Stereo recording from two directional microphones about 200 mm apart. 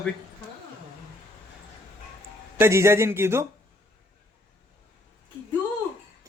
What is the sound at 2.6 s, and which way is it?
Speech, 15° right (ahead or behind).